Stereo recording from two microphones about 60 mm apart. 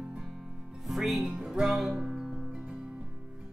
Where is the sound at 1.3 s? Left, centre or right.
Centre.